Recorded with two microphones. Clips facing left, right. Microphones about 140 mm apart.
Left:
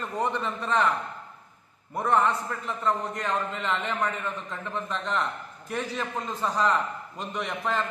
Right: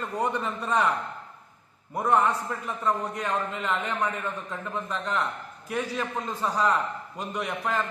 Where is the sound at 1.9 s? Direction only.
15° right (ahead or behind).